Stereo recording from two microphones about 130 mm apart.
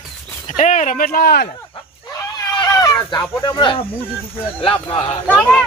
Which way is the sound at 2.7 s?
30° left (ahead or behind).